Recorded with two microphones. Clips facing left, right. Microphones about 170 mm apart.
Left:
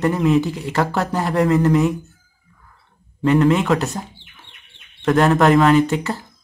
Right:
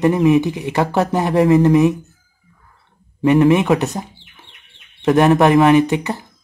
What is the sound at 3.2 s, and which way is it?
Speech, 20° right (ahead or behind).